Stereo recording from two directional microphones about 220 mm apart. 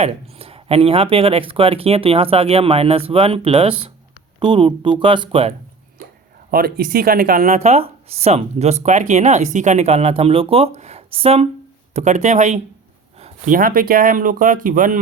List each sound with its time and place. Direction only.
0.0 s speech: 25° right (ahead or behind)
6.5 s speech: 45° right (ahead or behind)